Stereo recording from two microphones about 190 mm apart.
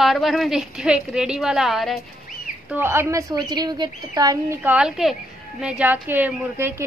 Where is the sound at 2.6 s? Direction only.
10° right (ahead or behind).